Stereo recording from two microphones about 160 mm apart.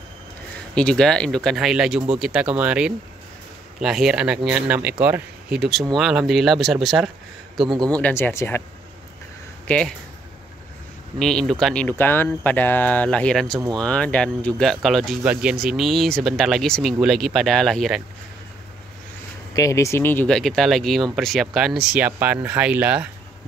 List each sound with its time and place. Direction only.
0.7 s speech: 5° left (ahead or behind)
7.6 s a man's voice: 25° right (ahead or behind)
7.9 s speech: 10° left (ahead or behind)
9.7 s speech: 5° left (ahead or behind)
11.1 s speech: 5° left (ahead or behind)
13.6 s a man's voice: 25° right (ahead or behind)
13.8 s speech: 5° left (ahead or behind)
19.5 s speech: 20° left (ahead or behind); by 23.0 s 10° right (ahead or behind)